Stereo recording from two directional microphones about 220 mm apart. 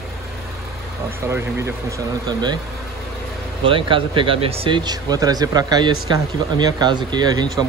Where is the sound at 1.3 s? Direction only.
15° right (ahead or behind).